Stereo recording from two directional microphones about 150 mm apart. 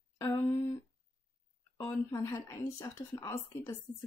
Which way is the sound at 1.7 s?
15° left (ahead or behind).